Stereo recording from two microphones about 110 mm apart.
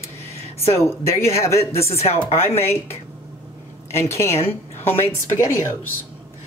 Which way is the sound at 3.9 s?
25° left (ahead or behind).